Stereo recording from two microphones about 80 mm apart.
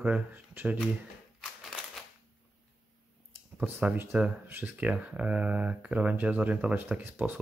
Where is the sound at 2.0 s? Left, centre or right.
Centre.